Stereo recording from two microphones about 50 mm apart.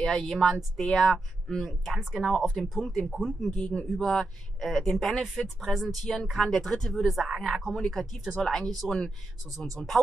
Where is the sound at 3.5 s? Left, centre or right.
Centre.